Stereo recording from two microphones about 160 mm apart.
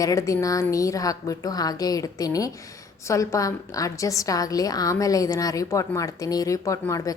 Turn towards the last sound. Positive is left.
turn(degrees=20)  # may be behind; listen again after turning